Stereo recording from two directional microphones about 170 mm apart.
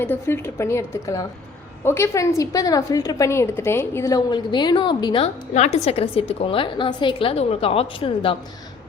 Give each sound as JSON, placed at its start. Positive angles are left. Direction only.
{"t": 0.0, "sound": "a woman's voice", "side_deg": 15}